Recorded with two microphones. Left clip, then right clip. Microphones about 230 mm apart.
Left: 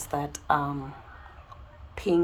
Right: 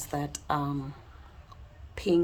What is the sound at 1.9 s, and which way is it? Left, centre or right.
Speech, right.